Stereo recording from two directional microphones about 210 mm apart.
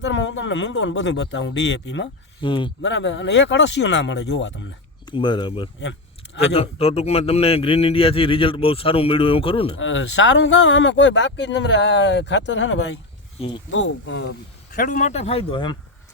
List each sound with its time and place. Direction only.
0.0 s speech: 60° left (ahead or behind)
2.4 s a man's voice: 20° left (ahead or behind)
2.8 s speech: 60° left (ahead or behind)
5.0 s a man's voice: 20° left (ahead or behind)
5.8 s a sound: 60° left (ahead or behind)
6.5 s a man's voice: 30° left (ahead or behind)
9.7 s speech: 65° left (ahead or behind)
14.7 s speech: 40° left (ahead or behind)